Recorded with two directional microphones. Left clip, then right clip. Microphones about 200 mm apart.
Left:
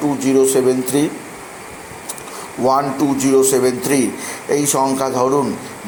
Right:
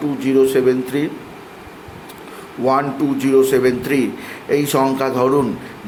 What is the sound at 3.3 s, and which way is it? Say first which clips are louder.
A man's voice: right 1 dB; 5° right (ahead or behind).